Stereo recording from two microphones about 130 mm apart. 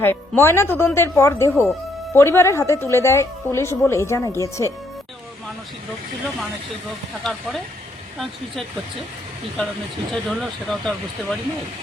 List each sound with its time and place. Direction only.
0.0 s a woman's voice: 15° left (ahead or behind)
7.3 s speech: centre (ahead or behind)
10.1 s speech: centre (ahead or behind)